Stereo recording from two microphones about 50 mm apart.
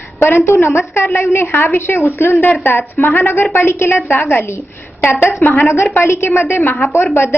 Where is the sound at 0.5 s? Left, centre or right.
Left.